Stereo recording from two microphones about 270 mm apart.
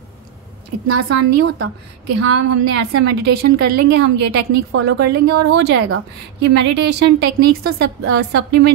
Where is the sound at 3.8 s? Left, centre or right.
Right.